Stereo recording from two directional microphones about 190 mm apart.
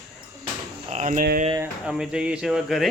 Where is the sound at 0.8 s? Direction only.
40° right (ahead or behind).